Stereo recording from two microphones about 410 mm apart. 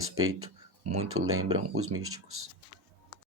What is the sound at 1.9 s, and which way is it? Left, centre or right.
Speech, right.